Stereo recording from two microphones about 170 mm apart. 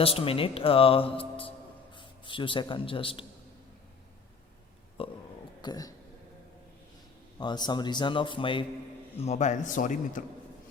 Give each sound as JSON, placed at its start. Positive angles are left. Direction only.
{"t": 0.0, "sound": "speech", "side_deg": 35}
{"t": 5.0, "sound": "burping", "side_deg": 35}
{"t": 5.6, "sound": "a man's voice", "side_deg": 20}
{"t": 7.3, "sound": "a man's voice", "side_deg": 25}
{"t": 9.1, "sound": "speech", "side_deg": 40}